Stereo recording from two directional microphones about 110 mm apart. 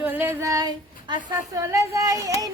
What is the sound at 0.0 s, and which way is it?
Child singing, 20° right (ahead or behind).